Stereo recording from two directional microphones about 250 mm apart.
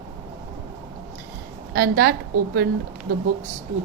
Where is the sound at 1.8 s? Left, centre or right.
Right.